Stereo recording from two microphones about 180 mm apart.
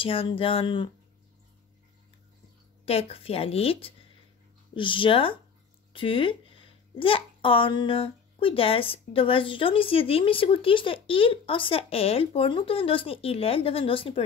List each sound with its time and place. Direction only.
0.0 s a woman's voice: 30° left (ahead or behind)
2.8 s a woman's voice: 35° left (ahead or behind)